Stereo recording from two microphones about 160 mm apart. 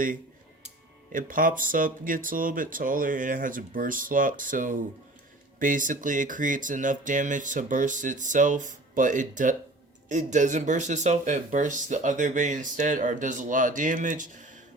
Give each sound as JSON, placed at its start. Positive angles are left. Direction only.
{"t": 1.1, "sound": "speech", "side_deg": -55}